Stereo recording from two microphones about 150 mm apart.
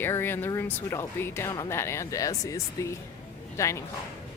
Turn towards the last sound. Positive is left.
turn(degrees=20)  # may be behind; listen again after turning